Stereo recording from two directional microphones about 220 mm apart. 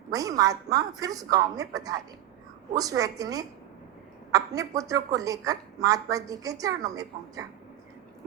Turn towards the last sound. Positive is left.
turn(degrees=-15)  # may be behind; listen again after turning